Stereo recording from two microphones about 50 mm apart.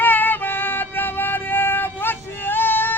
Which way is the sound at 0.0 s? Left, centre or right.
Left.